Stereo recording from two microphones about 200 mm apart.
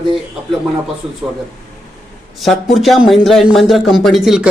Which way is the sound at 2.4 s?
Centre (ahead or behind).